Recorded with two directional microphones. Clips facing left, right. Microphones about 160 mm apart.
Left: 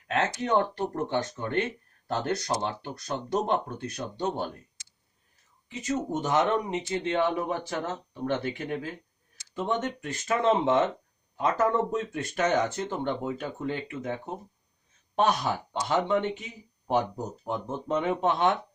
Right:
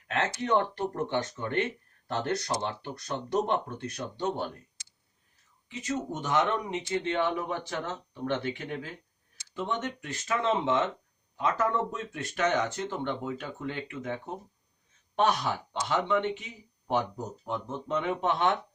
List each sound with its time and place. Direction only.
0.1 s speech: 35° left (ahead or behind)
5.6 s speech: 40° left (ahead or behind)
17.4 s speech: 45° left (ahead or behind)